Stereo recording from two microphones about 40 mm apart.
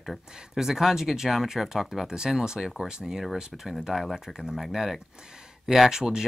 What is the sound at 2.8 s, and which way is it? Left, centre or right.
Speech, centre.